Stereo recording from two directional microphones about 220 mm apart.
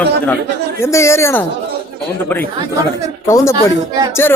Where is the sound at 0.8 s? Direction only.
10° left (ahead or behind).